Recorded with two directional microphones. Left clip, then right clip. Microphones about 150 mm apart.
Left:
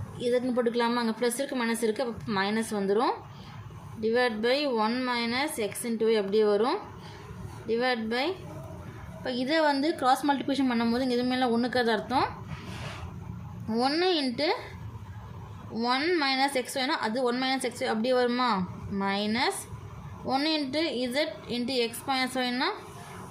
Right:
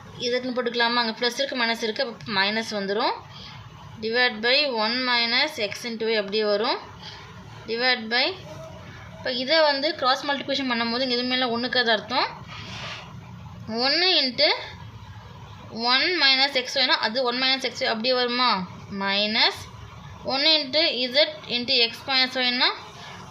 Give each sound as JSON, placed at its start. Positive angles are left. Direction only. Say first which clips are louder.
{"t": 0.2, "sound": "a woman's voice", "louder": "right 1 dB", "side_deg": 10}
{"t": 9.2, "sound": "a woman's voice", "louder": "right 5 dB", "side_deg": 25}
{"t": 13.7, "sound": "a woman's voice", "louder": "right 5 dB", "side_deg": 20}
{"t": 15.7, "sound": "a woman's voice", "louder": "right 5 dB", "side_deg": 15}